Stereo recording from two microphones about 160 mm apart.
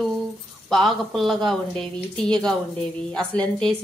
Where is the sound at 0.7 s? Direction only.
Centre (ahead or behind).